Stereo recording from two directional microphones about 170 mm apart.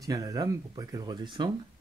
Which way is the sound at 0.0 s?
20° right (ahead or behind).